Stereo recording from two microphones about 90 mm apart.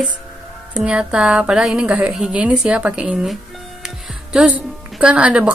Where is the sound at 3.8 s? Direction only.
10° right (ahead or behind).